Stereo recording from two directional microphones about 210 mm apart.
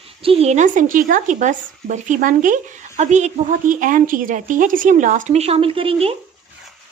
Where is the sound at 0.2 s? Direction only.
25° right (ahead or behind).